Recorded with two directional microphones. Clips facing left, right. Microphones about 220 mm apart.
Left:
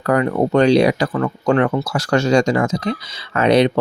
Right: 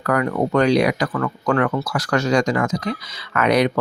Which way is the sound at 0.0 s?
25° left (ahead or behind).